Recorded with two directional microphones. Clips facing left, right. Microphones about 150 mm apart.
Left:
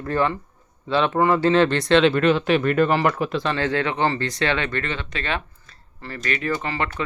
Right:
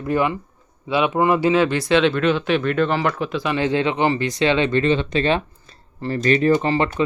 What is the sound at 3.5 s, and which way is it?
Speech, 15° right (ahead or behind).